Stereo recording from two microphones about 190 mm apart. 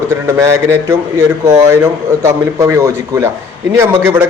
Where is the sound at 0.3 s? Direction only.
15° right (ahead or behind).